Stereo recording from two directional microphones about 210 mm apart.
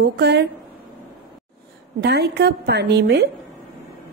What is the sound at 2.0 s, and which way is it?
A woman's voice, 50° right (ahead or behind).